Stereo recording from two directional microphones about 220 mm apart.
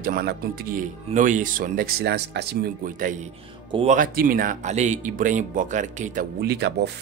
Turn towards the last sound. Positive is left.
turn(degrees=-50)  # may be behind; listen again after turning